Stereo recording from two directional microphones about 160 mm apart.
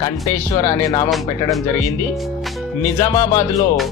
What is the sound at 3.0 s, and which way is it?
Speech, 20° left (ahead or behind).